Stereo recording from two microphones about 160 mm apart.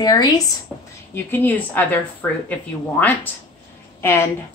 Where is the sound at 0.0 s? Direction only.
25° left (ahead or behind).